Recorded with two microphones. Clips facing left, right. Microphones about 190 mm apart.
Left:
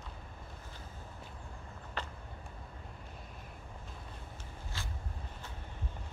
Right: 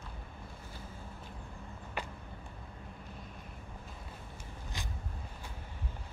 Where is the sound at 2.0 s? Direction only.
15° right (ahead or behind).